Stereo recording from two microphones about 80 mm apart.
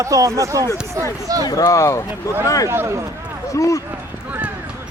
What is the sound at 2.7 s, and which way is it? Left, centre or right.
Speech, right.